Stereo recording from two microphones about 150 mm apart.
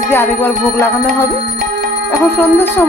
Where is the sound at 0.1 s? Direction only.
15° left (ahead or behind).